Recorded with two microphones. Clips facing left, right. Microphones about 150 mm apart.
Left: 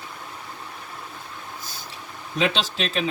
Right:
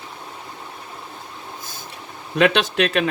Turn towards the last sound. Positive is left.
turn(degrees=-65)  # may be behind; listen again after turning